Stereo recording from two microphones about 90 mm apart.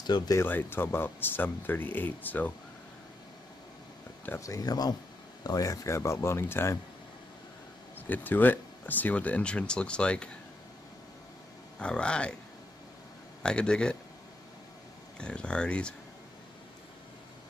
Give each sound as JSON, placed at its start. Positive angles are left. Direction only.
{"t": 0.0, "sound": "speech", "side_deg": 50}
{"t": 0.4, "sound": "speech", "side_deg": 25}
{"t": 4.4, "sound": "speech", "side_deg": 40}
{"t": 8.1, "sound": "speech", "side_deg": 20}
{"t": 11.8, "sound": "speech", "side_deg": 10}
{"t": 13.4, "sound": "speech", "side_deg": 10}
{"t": 15.1, "sound": "speech", "side_deg": 10}